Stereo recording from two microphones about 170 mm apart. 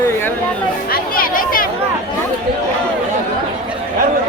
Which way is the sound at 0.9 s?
55° left (ahead or behind).